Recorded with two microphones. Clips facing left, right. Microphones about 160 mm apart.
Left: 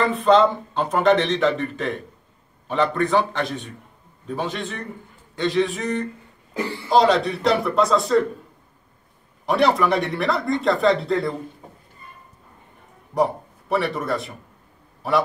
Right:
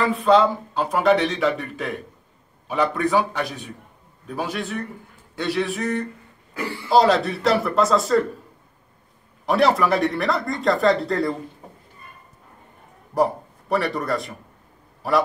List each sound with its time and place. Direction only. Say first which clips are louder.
0.0 s a man's voice: left 1 dB; 5° right (ahead or behind)
9.5 s speech: even; centre (ahead or behind)
13.1 s a man's voice: even; centre (ahead or behind)